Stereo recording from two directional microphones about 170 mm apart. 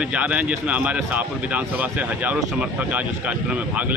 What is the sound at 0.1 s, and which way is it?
Speech, 10° right (ahead or behind).